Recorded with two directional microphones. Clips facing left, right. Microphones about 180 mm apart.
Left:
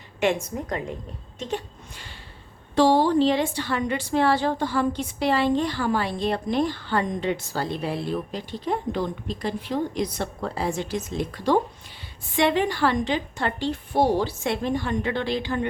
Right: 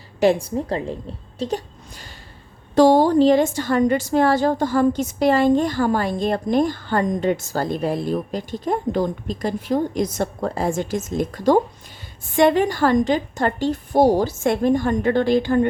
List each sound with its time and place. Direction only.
0.2 s a woman's voice: 35° right (ahead or behind)
1.4 s a sound: 40° right (ahead or behind)
2.7 s a woman's voice: 45° right (ahead or behind)